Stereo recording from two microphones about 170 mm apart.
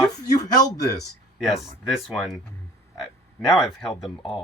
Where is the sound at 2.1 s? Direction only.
Centre (ahead or behind).